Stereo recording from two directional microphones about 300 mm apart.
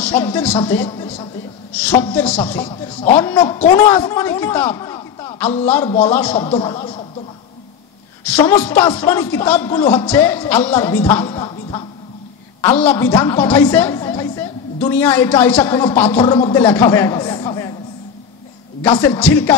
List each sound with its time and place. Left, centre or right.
0.0 s speech: centre
0.8 s a woman's voice: centre
1.8 s a sound: centre
2.1 s a man's voice: centre
2.6 s a woman's voice: centre
3.2 s a woman's voice: centre
6.3 s a woman's voice: centre
8.2 s a man's voice: centre
18.8 s a woman's voice: centre